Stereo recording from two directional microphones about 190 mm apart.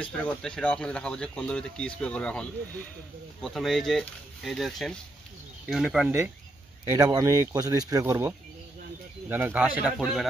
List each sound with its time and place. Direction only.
0.0 s speech: 5° left (ahead or behind)
3.4 s speech: centre (ahead or behind)
6.9 s speech: 20° right (ahead or behind); by 10.2 s centre (ahead or behind)